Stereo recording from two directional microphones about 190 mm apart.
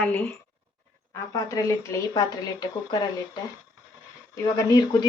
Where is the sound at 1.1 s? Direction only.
15° left (ahead or behind).